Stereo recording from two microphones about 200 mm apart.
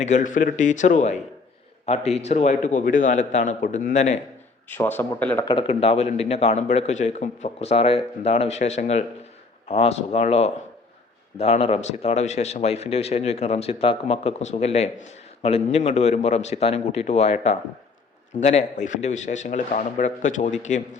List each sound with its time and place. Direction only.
0.0 s a man's voice: 40° left (ahead or behind)
4.7 s speech: 10° left (ahead or behind)
5.5 s a man's voice: 25° left (ahead or behind)